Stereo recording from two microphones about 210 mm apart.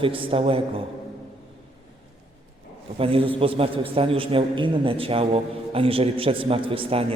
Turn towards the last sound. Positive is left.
turn(degrees=-25)  # may be behind; listen again after turning